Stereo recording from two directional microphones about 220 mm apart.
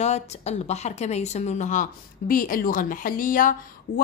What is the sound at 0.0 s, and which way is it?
A woman's voice, 30° left (ahead or behind).